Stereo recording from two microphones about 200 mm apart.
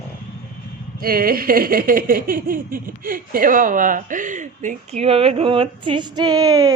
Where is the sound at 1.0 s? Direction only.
45° right (ahead or behind).